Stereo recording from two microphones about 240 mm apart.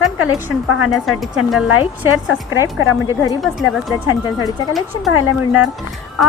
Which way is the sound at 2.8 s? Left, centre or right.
Left.